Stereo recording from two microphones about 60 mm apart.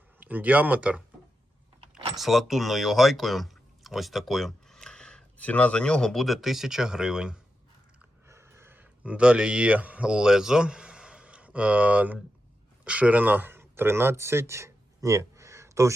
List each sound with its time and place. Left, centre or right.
0.2 s speech: right
2.1 s speech: centre
5.4 s speech: left; by 7.3 s centre
8.3 s a sound: right
8.8 s speech: right